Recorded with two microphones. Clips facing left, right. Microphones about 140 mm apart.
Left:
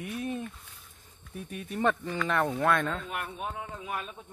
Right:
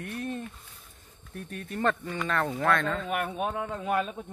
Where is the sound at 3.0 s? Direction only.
75° right (ahead or behind).